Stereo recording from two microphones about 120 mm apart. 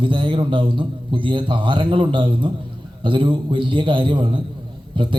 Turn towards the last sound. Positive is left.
turn(degrees=-45)  # may be behind; listen again after turning